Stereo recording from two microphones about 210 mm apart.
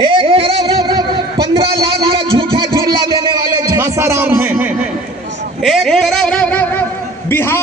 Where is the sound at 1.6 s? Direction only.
25° right (ahead or behind).